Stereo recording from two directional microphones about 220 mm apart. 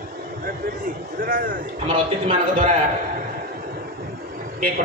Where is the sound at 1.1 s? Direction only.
40° right (ahead or behind).